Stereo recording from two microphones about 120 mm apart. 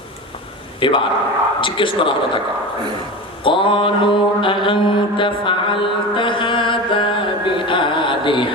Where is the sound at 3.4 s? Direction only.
45° left (ahead or behind).